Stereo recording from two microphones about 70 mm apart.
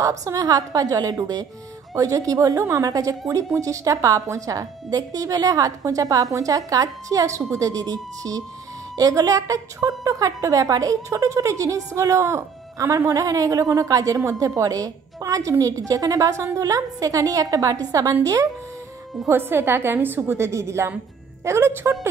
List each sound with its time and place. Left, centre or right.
0.0 s a woman's voice: right
19.2 s a woman's voice: right